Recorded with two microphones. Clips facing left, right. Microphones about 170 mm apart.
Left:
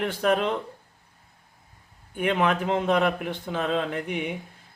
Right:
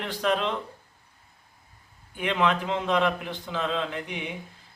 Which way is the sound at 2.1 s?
45° left (ahead or behind).